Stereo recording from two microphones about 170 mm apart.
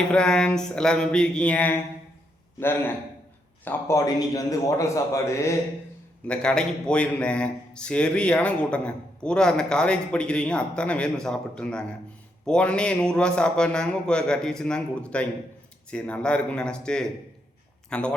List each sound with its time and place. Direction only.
0.1 s a man's voice: 5° left (ahead or behind)
6.2 s a man's voice: 5° left (ahead or behind)